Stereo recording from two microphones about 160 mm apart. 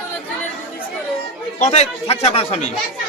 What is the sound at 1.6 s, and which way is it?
Speech, 45° left (ahead or behind).